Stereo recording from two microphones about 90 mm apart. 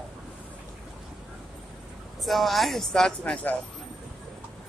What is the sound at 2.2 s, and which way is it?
Speech, centre (ahead or behind).